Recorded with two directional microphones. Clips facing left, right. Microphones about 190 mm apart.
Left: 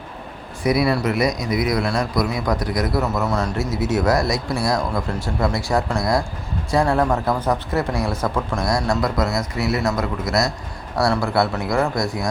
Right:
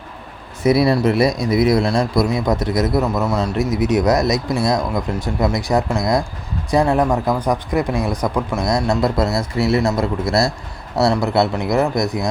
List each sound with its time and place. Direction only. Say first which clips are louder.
0.6 s a man's voice: right 4 dB; 25° right (ahead or behind)